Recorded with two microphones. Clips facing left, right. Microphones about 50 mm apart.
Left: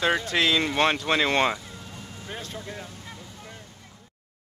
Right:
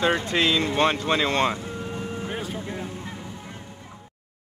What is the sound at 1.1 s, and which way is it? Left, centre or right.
Speech, left.